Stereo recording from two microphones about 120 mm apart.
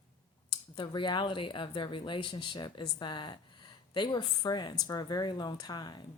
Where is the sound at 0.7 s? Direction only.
40° left (ahead or behind).